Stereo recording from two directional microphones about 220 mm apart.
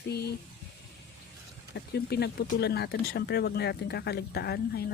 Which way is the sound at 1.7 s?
45° left (ahead or behind).